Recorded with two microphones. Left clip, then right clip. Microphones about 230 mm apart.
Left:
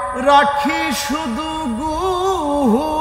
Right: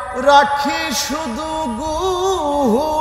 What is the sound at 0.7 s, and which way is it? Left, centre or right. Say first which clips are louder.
Speech: left 1 dB; left.